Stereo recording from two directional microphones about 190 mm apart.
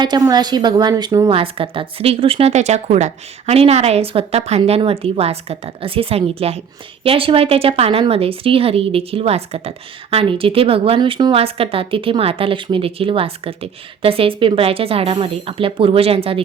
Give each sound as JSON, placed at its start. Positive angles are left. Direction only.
{"t": 0.0, "sound": "a woman's voice", "side_deg": -20}